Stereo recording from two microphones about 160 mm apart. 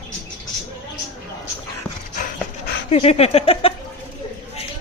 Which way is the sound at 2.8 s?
40° left (ahead or behind).